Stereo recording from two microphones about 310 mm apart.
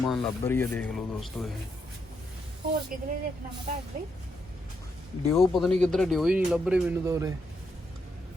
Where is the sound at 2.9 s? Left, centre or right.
Right.